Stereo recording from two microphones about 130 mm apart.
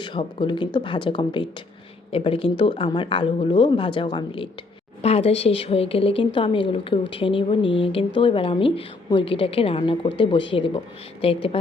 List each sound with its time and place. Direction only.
0.0 s speech: 40° left (ahead or behind)
5.0 s speech: 50° left (ahead or behind)